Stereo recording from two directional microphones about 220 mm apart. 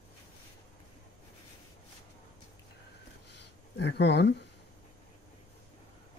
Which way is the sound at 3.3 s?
50° left (ahead or behind).